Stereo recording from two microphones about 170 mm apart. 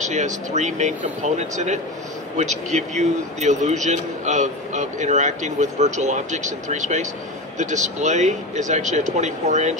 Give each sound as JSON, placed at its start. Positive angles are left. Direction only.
{"t": 0.0, "sound": "a man's voice", "side_deg": -45}